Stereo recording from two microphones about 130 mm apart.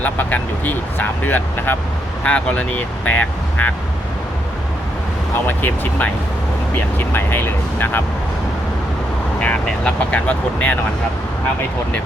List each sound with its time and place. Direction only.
0.0 s speech: 10° left (ahead or behind)
5.5 s speech: 15° left (ahead or behind)
9.4 s speech: 10° left (ahead or behind)